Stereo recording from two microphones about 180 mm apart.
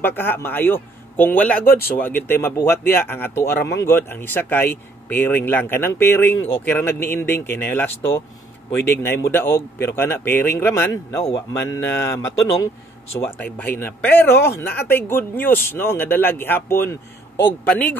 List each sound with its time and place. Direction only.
0.0 s speech: 10° left (ahead or behind)
1.7 s speech: 55° left (ahead or behind)
2.0 s speech: 10° left (ahead or behind)